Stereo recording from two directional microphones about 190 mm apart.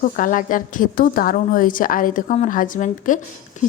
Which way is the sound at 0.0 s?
45° left (ahead or behind).